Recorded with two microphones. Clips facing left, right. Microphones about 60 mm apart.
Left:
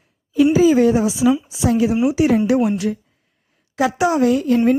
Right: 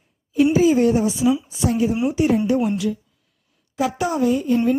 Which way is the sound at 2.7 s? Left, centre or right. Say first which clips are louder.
Left 2 dB; left.